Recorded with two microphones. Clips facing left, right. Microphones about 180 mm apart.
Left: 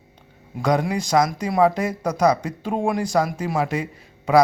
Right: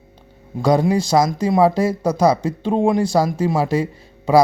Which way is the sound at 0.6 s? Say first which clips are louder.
Right 5 dB; 30° right (ahead or behind).